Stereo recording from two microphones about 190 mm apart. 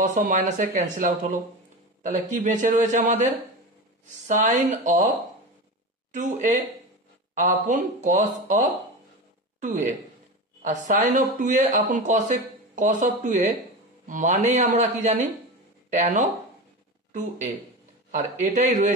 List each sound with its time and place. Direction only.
0.0 s speech: 45° right (ahead or behind)
6.1 s speech: 40° right (ahead or behind)
18.1 s speech: 40° right (ahead or behind)